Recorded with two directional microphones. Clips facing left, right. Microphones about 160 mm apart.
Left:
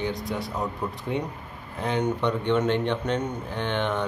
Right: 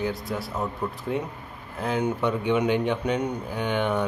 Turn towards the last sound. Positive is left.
turn(degrees=-10)  # may be behind; listen again after turning